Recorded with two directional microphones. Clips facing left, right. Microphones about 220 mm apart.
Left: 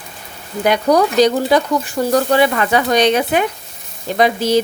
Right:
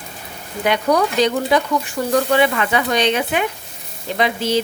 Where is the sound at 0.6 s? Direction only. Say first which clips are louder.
Left 3 dB; 40° left (ahead or behind).